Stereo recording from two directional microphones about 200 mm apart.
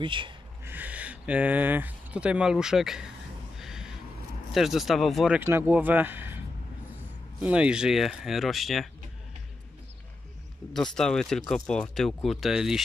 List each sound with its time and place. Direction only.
0.0 s speech: 25° right (ahead or behind)
0.7 s speech: 10° right (ahead or behind)
3.5 s a sound: centre (ahead or behind)
4.6 s speech: centre (ahead or behind)
5.4 s speech: 10° right (ahead or behind)
10.7 s speech: 5° left (ahead or behind)